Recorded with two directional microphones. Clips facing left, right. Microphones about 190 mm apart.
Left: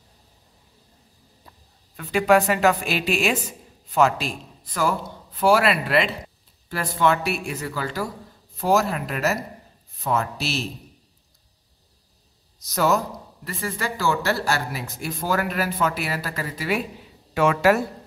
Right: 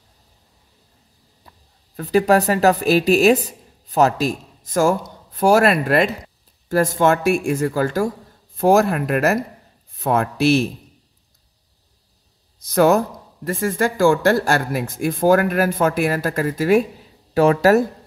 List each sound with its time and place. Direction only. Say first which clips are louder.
2.0 s a woman's voice: right 3 dB; 40° right (ahead or behind); by 10.7 s 55° right (ahead or behind)
12.6 s speech: right 7 dB; 55° right (ahead or behind); by 17.8 s 40° right (ahead or behind)